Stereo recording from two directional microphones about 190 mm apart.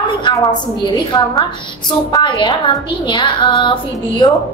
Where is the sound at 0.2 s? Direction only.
20° left (ahead or behind).